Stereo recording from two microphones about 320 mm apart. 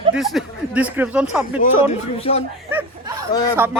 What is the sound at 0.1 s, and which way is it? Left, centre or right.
Speech, centre.